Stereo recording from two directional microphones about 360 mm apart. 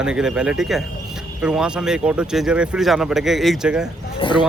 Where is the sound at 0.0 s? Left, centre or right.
Centre.